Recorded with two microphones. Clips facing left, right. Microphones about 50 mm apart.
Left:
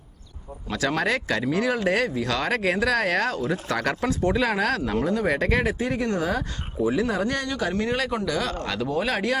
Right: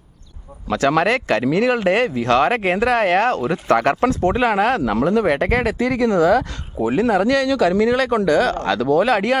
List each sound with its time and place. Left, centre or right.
0.7 s speech: right
4.9 s speech: right
6.7 s speech: right
8.0 s speech: right